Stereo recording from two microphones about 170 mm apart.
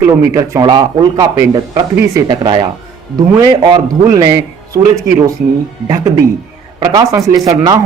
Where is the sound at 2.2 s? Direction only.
30° right (ahead or behind).